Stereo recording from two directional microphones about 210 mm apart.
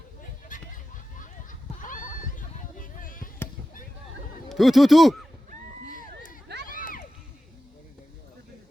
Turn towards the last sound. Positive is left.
turn(degrees=40)  # may be behind; listen again after turning